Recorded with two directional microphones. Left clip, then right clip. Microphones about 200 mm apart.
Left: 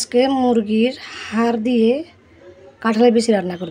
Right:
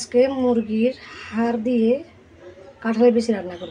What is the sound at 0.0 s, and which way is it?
Speech, 55° left (ahead or behind).